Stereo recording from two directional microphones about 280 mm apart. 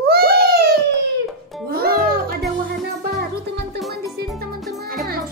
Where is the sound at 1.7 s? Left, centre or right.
Right.